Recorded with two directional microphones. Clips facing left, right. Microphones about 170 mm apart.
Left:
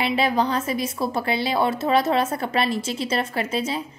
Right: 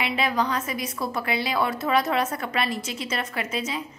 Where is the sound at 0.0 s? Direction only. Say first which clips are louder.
Left 4 dB; 30° left (ahead or behind).